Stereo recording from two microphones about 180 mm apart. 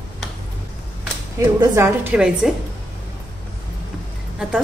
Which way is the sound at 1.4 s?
15° right (ahead or behind).